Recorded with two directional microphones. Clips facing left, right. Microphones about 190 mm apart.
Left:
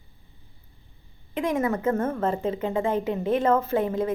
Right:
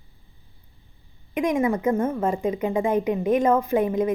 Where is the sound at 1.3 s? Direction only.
15° right (ahead or behind).